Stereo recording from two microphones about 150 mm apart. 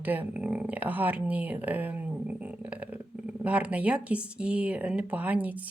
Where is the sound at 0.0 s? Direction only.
10° right (ahead or behind).